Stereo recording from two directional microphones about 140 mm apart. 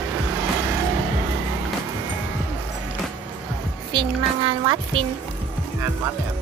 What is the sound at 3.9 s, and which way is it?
A child's voice, 35° right (ahead or behind).